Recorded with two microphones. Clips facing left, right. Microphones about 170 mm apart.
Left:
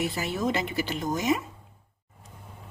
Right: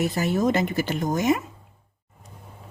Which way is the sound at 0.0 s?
45° right (ahead or behind).